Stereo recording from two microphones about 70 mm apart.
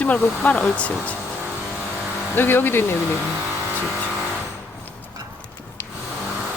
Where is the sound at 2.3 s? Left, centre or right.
Left.